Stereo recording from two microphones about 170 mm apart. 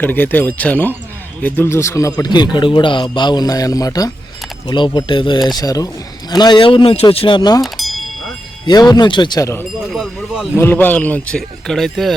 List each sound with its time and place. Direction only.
0.0 s speech: 10° left (ahead or behind); by 7.6 s 25° left (ahead or behind)
7.6 s a sound: centre (ahead or behind)
8.6 s speech: 25° left (ahead or behind)
9.9 s speech: centre (ahead or behind)
10.6 s speech: 10° left (ahead or behind)